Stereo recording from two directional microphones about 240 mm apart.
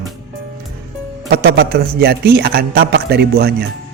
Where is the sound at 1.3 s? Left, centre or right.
Right.